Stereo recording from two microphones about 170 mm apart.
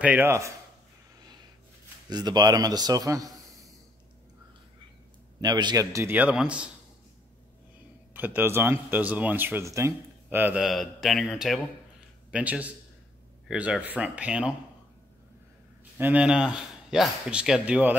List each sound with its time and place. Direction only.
0.0 s speech: 10° right (ahead or behind)
2.0 s a man's voice: 25° right (ahead or behind)
5.4 s speech: 25° right (ahead or behind); by 6.7 s 5° right (ahead or behind)
8.1 s speech: 10° right (ahead or behind)
16.0 s speech: 10° right (ahead or behind)